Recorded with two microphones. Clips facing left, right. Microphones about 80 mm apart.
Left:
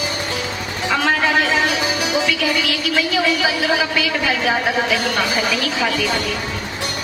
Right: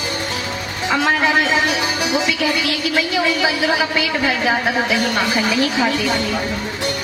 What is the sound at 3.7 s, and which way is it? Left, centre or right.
A woman's voice, right.